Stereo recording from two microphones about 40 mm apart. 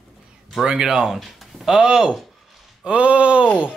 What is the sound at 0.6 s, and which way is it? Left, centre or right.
Speech, centre.